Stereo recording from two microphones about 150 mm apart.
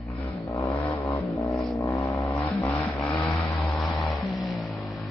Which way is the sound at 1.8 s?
20° left (ahead or behind).